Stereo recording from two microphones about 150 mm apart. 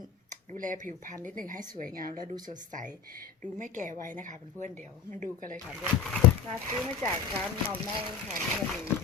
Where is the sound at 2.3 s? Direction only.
60° right (ahead or behind).